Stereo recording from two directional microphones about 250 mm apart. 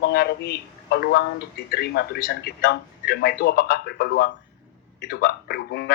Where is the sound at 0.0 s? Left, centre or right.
Left.